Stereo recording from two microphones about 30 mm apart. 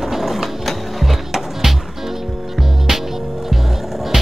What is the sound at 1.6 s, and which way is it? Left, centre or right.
Music, centre.